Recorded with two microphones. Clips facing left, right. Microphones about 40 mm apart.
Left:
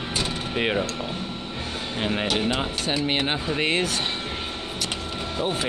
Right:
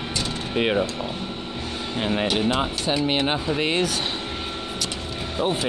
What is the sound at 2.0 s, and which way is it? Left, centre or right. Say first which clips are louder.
Speech: right 2 dB; centre.